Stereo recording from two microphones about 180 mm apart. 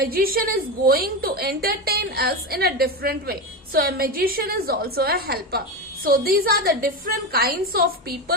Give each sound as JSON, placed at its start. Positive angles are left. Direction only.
{"t": 0.0, "sound": "a woman's voice", "side_deg": -55}